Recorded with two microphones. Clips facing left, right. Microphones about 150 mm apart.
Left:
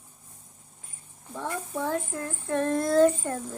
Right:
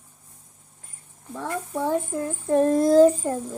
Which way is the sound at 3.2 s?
10° right (ahead or behind).